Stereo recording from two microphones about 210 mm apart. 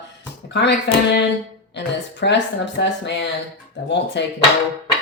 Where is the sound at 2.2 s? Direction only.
55° left (ahead or behind).